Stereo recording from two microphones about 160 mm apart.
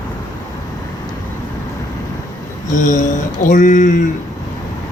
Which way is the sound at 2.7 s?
50° left (ahead or behind).